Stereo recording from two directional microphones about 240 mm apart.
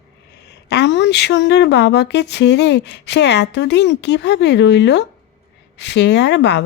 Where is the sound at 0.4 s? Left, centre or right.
Left.